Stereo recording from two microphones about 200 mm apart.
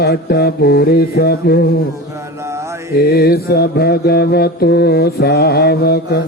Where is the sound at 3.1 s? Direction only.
50° left (ahead or behind).